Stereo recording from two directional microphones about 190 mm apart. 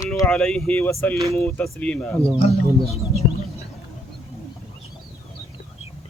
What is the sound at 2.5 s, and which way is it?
Speech, 30° left (ahead or behind).